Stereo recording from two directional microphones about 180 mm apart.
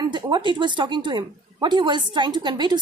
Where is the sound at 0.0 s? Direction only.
25° right (ahead or behind).